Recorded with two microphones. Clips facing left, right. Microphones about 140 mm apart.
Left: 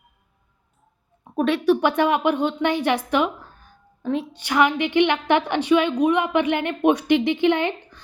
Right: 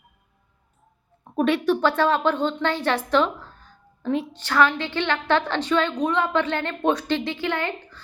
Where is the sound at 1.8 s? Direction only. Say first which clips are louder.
Left 1 dB; 15° left (ahead or behind).